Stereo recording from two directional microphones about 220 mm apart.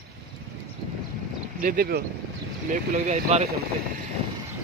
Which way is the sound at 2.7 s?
30° right (ahead or behind).